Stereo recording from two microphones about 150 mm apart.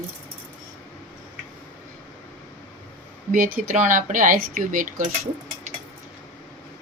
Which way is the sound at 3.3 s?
60° right (ahead or behind).